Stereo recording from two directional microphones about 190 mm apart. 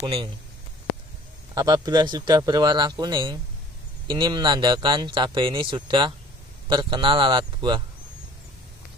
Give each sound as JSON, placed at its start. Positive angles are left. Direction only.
{"t": 0.0, "sound": "speech", "side_deg": -25}
{"t": 1.5, "sound": "speech", "side_deg": -20}